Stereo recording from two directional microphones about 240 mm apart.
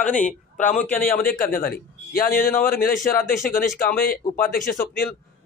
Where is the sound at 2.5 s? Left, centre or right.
Centre.